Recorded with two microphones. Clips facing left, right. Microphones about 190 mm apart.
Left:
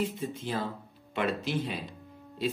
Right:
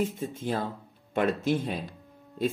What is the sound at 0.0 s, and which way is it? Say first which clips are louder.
A man's voice: right 2 dB; 50° right (ahead or behind).